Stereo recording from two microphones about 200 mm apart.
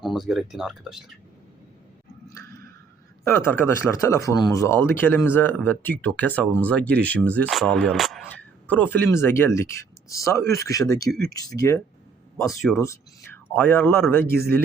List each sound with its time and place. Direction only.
0.0 s speech: centre (ahead or behind)
2.2 s a sound: 15° left (ahead or behind)
3.2 s speech: 10° left (ahead or behind)
12.4 s speech: centre (ahead or behind)
12.7 s speech: 15° left (ahead or behind)